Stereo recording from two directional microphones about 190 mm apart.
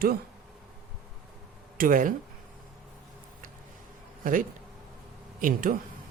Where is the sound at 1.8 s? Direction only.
45° right (ahead or behind).